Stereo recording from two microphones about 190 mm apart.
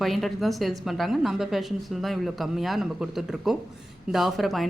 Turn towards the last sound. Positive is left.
turn(degrees=0)  # may be behind; listen again after turning